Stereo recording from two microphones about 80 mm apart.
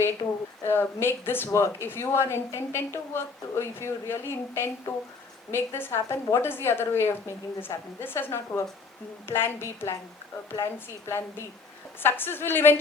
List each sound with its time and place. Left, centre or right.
0.6 s a woman's voice: left